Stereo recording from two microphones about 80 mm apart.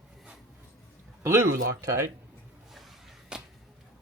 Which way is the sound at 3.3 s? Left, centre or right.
Centre.